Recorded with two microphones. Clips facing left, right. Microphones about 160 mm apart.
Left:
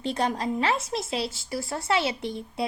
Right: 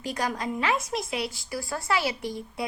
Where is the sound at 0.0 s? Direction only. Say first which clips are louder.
Left 3 dB; 25° left (ahead or behind).